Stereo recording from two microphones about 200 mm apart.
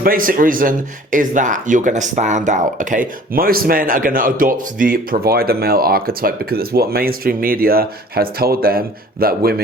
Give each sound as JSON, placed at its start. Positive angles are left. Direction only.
{"t": 0.0, "sound": "speech", "side_deg": -45}